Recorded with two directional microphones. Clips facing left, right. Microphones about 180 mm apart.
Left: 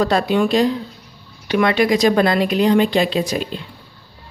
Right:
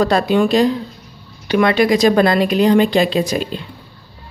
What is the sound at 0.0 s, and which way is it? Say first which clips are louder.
A woman's voice: right 2 dB; 50° right (ahead or behind).